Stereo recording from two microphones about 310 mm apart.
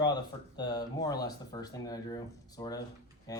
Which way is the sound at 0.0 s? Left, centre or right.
Centre.